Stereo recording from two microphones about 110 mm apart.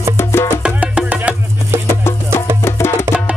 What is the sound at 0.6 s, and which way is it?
Music, 10° right (ahead or behind).